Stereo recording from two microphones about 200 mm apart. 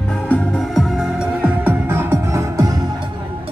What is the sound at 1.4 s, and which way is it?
Music, 10° right (ahead or behind).